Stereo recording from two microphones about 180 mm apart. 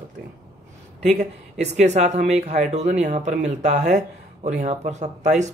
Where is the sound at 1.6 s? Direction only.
40° right (ahead or behind).